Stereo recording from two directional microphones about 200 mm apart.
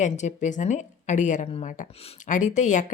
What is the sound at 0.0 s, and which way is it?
A woman's voice, 35° left (ahead or behind).